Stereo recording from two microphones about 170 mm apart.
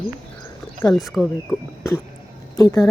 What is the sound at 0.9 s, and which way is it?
Speech, centre (ahead or behind).